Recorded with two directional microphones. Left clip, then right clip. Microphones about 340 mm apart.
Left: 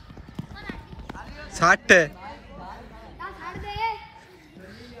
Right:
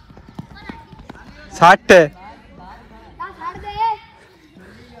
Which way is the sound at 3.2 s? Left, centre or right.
Centre.